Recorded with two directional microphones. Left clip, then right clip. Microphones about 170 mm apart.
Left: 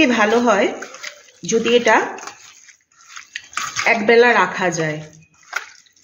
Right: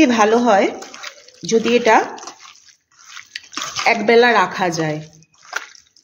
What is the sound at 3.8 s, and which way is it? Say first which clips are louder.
A woman's voice: even; 55° right (ahead or behind).